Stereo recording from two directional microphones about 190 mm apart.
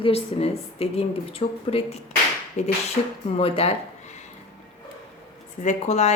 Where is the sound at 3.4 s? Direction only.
30° left (ahead or behind).